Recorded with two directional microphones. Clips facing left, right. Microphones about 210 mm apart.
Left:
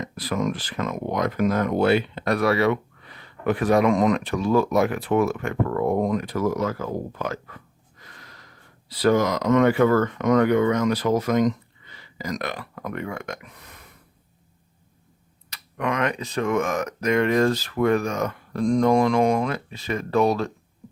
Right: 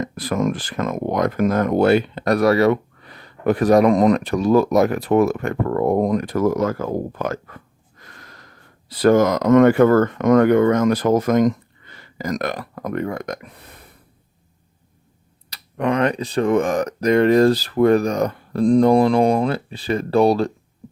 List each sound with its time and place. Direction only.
0.0 s speech: 50° right (ahead or behind)
8.0 s gasp: 50° right (ahead or behind)
8.9 s speech: 50° right (ahead or behind); by 13.8 s 35° right (ahead or behind)
15.4 s speech: 35° right (ahead or behind)